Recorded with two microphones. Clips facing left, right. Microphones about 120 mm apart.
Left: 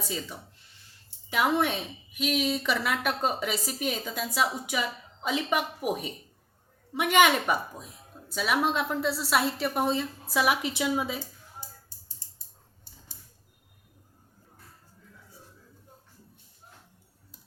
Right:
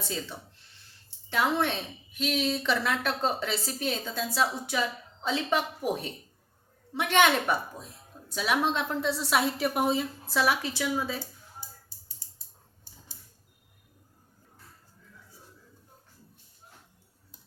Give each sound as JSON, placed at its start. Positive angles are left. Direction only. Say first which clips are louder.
{"t": 0.0, "sound": "a woman's voice", "louder": "even", "side_deg": 10}
{"t": 10.2, "sound": "a woman's voice", "louder": "left 1 dB", "side_deg": 10}